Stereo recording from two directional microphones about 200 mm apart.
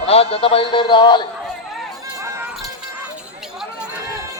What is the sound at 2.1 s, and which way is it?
Run, 15° right (ahead or behind).